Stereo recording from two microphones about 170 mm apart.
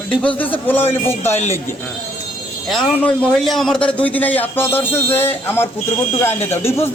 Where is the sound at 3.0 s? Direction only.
5° left (ahead or behind).